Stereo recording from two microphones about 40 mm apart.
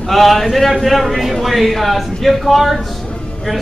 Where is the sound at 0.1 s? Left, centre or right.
Centre.